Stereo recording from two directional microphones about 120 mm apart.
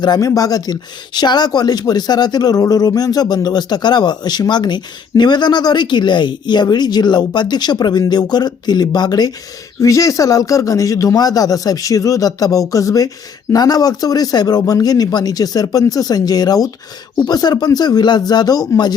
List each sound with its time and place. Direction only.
0.0 s speech: 30° left (ahead or behind)